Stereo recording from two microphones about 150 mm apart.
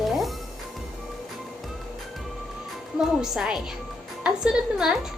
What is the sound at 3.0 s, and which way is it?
A woman's voice, 5° right (ahead or behind).